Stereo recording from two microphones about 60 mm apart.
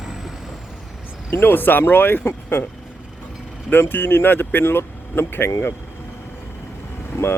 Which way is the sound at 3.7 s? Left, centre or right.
Left.